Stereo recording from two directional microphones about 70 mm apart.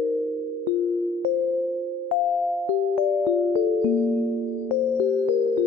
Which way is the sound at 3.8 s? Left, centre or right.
Left.